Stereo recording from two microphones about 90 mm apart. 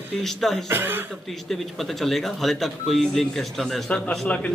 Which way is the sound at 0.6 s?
25° right (ahead or behind).